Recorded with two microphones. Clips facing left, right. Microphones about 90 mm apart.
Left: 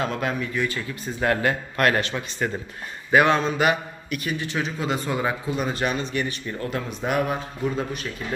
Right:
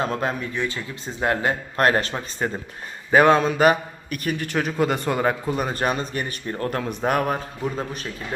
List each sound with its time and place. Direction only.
0.0 s a man's voice: 35° right (ahead or behind)